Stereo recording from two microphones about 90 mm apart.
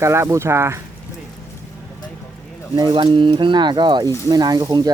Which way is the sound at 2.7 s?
55° right (ahead or behind).